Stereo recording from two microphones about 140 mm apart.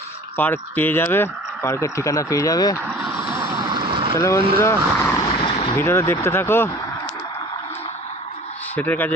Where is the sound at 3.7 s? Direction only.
35° right (ahead or behind).